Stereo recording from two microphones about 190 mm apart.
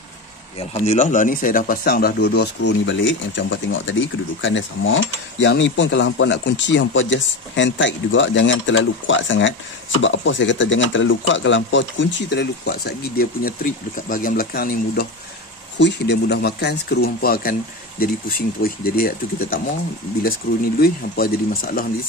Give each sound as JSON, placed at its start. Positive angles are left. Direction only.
{"t": 0.6, "sound": "speech", "side_deg": 35}
{"t": 5.4, "sound": "speech", "side_deg": 70}
{"t": 20.8, "sound": "speech", "side_deg": 50}